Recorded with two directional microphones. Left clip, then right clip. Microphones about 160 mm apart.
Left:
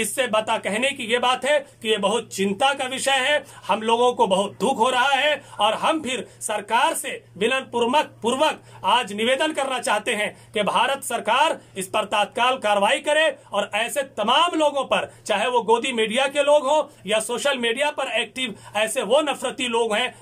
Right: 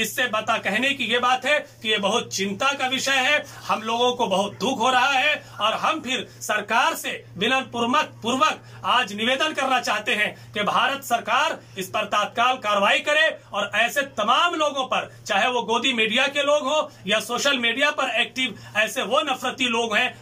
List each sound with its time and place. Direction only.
0.1 s a man's voice: 45° left (ahead or behind)